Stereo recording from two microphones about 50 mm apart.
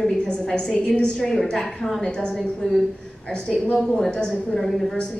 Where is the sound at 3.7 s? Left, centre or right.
Centre.